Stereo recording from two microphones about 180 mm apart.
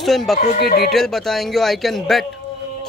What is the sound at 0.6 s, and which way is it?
Speech, 60° left (ahead or behind).